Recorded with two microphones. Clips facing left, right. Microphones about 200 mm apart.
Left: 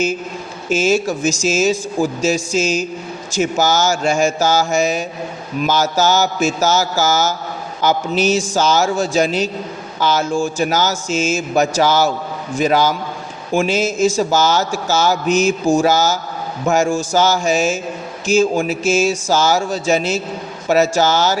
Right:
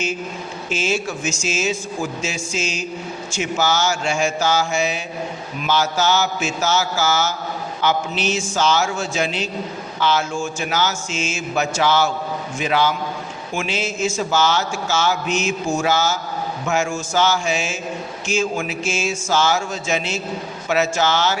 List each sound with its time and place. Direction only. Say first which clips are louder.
0.7 s a man's voice: left 7 dB; 40° left (ahead or behind)